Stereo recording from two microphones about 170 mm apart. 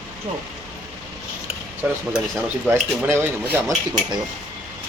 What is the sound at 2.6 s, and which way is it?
Speech, 15° right (ahead or behind).